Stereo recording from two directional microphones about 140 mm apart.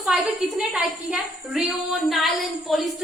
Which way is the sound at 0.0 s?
5° right (ahead or behind).